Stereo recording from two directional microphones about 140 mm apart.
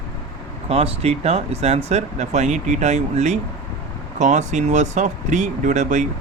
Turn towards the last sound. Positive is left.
turn(degrees=-60)  # may be behind; listen again after turning